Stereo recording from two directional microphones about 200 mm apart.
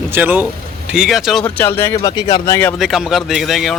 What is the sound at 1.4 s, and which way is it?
Speech, 10° left (ahead or behind).